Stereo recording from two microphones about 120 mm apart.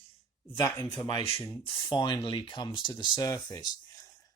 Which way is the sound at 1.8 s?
40° left (ahead or behind).